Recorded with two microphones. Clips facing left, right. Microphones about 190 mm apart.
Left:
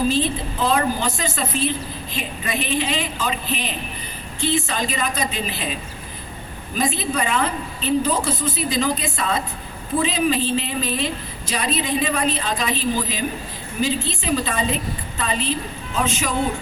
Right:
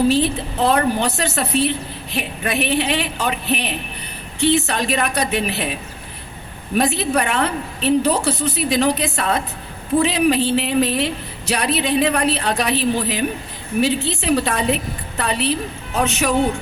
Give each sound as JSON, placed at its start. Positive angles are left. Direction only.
{"t": 0.1, "sound": "a woman's voice", "side_deg": -75}
{"t": 6.7, "sound": "a woman's voice", "side_deg": -75}